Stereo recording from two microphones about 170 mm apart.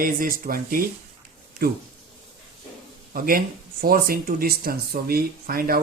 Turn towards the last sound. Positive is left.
turn(degrees=-60)  # may be behind; listen again after turning